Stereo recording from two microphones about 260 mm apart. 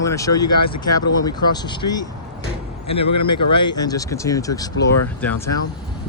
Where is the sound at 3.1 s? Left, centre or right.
Left.